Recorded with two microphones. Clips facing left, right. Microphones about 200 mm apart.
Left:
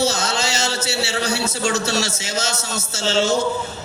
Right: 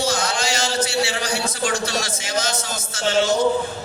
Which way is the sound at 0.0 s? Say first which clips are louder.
Left 1 dB; 25° left (ahead or behind).